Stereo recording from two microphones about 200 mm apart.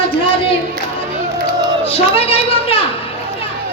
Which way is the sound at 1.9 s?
30° left (ahead or behind).